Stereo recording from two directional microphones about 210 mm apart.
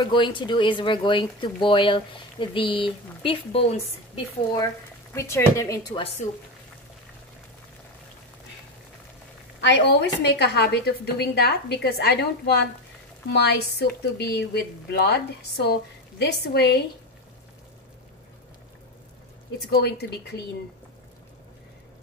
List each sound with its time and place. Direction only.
0.0 s speech: 25° left (ahead or behind)
5.1 s a woman's voice: 15° left (ahead or behind)
9.6 s speech: 55° left (ahead or behind)
19.6 s speech: 50° left (ahead or behind)